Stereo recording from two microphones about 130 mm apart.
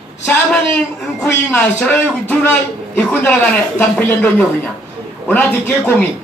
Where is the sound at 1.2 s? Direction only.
15° left (ahead or behind).